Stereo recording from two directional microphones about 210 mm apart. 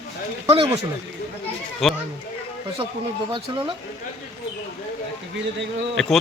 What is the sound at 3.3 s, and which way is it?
Speech, 25° right (ahead or behind).